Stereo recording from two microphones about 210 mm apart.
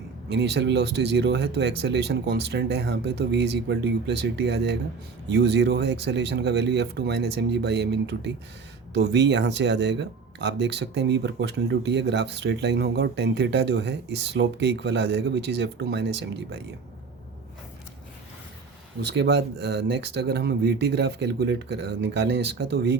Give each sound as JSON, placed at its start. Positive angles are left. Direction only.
{"t": 0.3, "sound": "speech", "side_deg": -50}
{"t": 19.0, "sound": "speech", "side_deg": -55}